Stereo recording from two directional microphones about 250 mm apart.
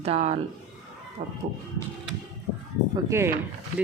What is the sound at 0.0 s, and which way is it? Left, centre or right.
Speech, right.